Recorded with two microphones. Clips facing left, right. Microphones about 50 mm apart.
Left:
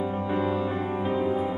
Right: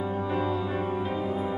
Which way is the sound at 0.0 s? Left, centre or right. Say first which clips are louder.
Left 2 dB; centre.